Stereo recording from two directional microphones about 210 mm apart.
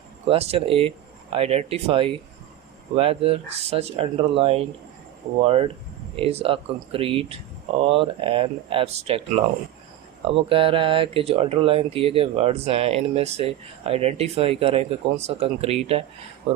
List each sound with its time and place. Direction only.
0.3 s speech: 25° right (ahead or behind)
10.2 s speech: 25° right (ahead or behind)